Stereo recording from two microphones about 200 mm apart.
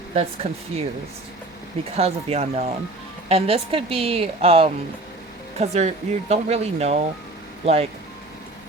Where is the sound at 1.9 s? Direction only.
30° right (ahead or behind).